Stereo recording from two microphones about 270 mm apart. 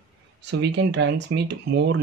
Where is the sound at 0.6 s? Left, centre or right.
Right.